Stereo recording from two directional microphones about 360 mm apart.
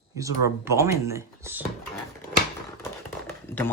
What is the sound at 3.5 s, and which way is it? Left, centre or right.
Speech, centre.